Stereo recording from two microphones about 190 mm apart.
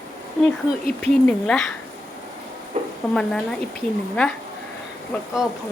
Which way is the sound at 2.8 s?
35° right (ahead or behind).